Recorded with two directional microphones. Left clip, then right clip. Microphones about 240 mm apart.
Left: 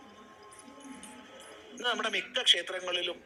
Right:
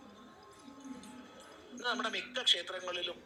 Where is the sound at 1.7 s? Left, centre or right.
Left.